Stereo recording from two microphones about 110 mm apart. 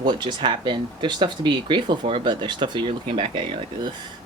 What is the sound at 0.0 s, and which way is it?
Speech, 45° right (ahead or behind).